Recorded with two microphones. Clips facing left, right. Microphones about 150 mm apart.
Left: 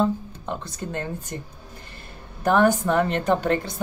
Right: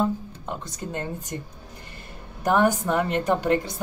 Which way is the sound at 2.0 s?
15° right (ahead or behind).